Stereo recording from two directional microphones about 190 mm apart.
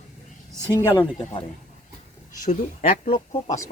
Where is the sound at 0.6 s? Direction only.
20° left (ahead or behind).